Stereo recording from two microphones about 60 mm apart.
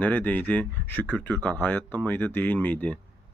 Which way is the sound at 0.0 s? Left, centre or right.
Left.